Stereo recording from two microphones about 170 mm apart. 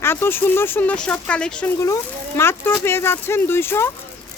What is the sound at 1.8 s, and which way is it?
Speech, 15° left (ahead or behind).